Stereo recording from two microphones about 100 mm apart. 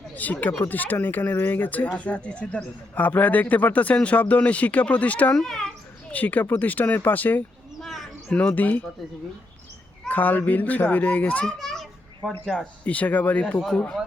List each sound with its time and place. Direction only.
0.1 s speech: 15° left (ahead or behind)
5.4 s children playing: 5° left (ahead or behind)
6.1 s speech: 15° left (ahead or behind)
7.8 s a sound: centre (ahead or behind)
8.3 s speech: 10° left (ahead or behind)
10.1 s speech: 15° left (ahead or behind)
11.6 s children playing: centre (ahead or behind)
12.8 s speech: 15° left (ahead or behind)